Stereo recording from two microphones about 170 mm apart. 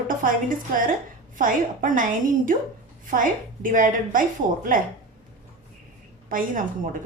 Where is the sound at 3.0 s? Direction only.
50° right (ahead or behind).